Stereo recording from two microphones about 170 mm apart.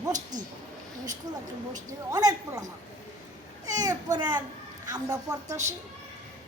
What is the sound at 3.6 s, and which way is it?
A child's voice, 20° right (ahead or behind).